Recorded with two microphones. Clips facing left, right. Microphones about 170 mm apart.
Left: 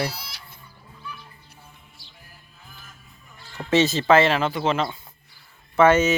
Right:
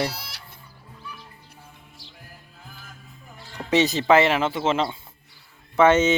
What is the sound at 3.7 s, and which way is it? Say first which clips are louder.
Speech: even; 15° right (ahead or behind).